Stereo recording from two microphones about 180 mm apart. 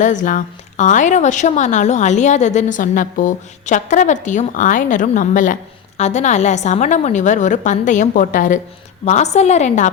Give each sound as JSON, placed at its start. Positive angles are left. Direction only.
{"t": 0.0, "sound": "a woman's voice", "side_deg": 45}